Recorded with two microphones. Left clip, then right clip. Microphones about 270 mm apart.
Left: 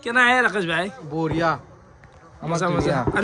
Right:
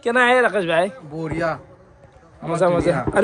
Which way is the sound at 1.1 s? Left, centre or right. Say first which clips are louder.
Left 2 dB; left.